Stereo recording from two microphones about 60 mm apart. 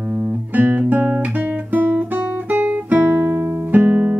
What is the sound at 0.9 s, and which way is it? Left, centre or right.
Guitar, right.